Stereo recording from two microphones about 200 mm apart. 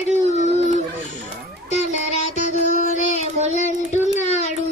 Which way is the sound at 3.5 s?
35° left (ahead or behind).